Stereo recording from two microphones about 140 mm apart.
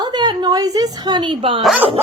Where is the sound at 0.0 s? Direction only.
30° right (ahead or behind).